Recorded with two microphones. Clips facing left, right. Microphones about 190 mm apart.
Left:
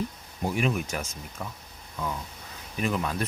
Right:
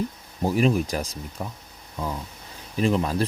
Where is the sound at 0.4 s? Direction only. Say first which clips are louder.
Right 6 dB; 35° right (ahead or behind).